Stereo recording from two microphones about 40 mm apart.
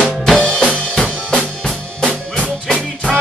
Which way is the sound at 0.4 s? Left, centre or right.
Left.